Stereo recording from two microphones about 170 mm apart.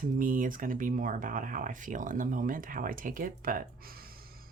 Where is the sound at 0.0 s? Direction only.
55° right (ahead or behind).